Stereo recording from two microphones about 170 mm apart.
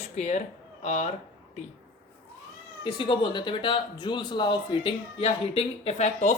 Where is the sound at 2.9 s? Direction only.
30° left (ahead or behind).